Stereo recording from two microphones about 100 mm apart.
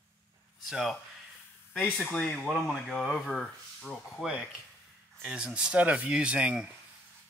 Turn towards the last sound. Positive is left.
turn(degrees=-10)  # may be behind; listen again after turning